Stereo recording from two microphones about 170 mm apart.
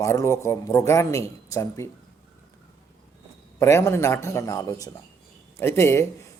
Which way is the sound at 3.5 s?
15° left (ahead or behind).